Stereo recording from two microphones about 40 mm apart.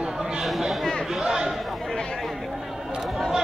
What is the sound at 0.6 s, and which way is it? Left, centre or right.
Speech, centre.